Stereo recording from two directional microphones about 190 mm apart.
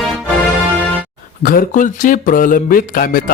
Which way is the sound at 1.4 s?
45° left (ahead or behind).